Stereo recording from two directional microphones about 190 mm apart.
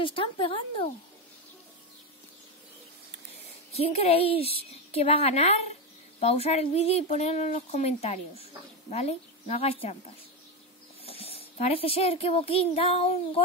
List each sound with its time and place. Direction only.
0.0 s speech: 30° left (ahead or behind)
3.7 s speech: 35° left (ahead or behind)